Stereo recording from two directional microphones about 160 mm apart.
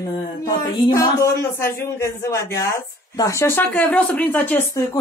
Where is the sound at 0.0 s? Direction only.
20° left (ahead or behind).